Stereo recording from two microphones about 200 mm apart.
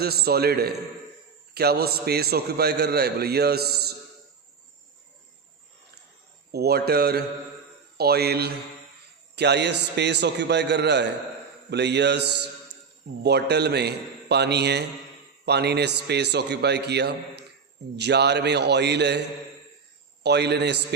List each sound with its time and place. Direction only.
0.0 s a man's voice: 50° right (ahead or behind)
6.5 s a man's voice: 50° right (ahead or behind)
20.2 s a man's voice: 55° right (ahead or behind)